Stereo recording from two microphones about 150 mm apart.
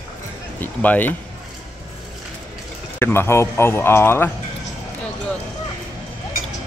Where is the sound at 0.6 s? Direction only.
10° left (ahead or behind).